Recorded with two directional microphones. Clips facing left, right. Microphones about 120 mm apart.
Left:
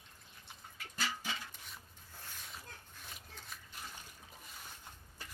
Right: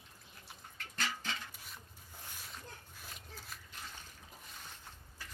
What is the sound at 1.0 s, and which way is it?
Music, 10° left (ahead or behind).